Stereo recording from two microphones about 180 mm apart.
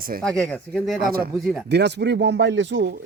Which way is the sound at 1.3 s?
Centre (ahead or behind).